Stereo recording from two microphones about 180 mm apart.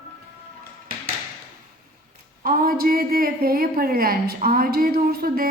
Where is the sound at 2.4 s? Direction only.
55° right (ahead or behind).